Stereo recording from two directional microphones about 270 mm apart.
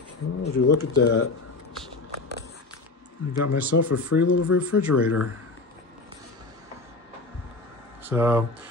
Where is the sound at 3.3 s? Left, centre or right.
Left.